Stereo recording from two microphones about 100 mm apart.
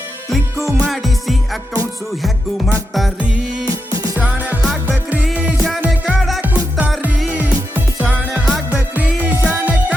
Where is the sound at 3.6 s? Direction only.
35° right (ahead or behind).